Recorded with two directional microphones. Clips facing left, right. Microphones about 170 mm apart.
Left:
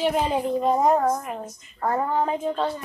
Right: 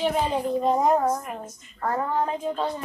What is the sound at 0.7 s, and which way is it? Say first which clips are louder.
A woman's voice: left 2 dB; centre (ahead or behind).